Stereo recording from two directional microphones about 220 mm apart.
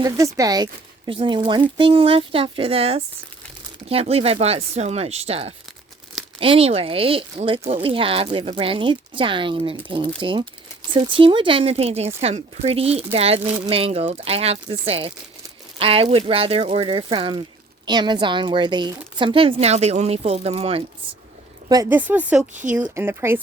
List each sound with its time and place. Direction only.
0.3 s speech: 15° right (ahead or behind)
21.7 s speech: 10° right (ahead or behind)